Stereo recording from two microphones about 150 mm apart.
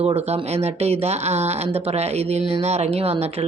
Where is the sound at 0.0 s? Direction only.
45° right (ahead or behind).